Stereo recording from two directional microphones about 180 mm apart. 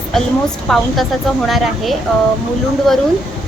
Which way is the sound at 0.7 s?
Centre (ahead or behind).